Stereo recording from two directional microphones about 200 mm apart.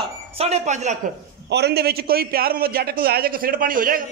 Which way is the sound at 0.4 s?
35° right (ahead or behind).